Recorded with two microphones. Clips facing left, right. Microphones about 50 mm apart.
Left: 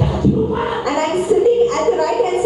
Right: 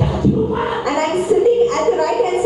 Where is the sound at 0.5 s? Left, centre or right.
Centre.